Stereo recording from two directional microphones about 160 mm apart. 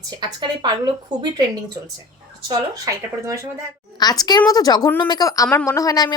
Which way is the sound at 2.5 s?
20° right (ahead or behind).